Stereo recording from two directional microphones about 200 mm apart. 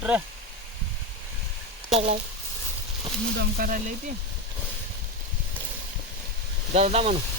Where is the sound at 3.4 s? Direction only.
45° right (ahead or behind).